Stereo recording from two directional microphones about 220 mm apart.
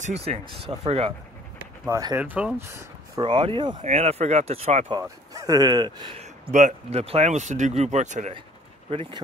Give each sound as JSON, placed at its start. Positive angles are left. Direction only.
{"t": 0.0, "sound": "speech", "side_deg": -30}
{"t": 1.9, "sound": "speech", "side_deg": -15}
{"t": 5.0, "sound": "speech", "side_deg": -15}